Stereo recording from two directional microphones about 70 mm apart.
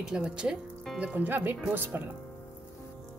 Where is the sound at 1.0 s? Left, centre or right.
Right.